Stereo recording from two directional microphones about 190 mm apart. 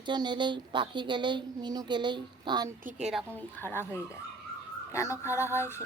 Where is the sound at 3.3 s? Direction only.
10° left (ahead or behind).